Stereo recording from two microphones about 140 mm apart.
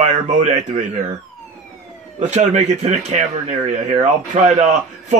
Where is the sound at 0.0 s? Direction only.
55° right (ahead or behind).